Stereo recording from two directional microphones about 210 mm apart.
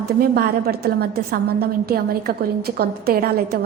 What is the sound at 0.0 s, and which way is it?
A woman's voice, 50° right (ahead or behind).